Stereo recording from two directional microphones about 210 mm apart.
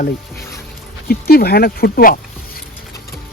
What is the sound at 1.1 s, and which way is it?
A man's voice, 45° left (ahead or behind).